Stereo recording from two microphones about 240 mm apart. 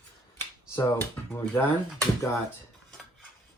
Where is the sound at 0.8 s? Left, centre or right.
Centre.